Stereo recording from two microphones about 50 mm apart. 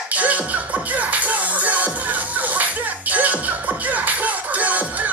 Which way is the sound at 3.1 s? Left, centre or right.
Right.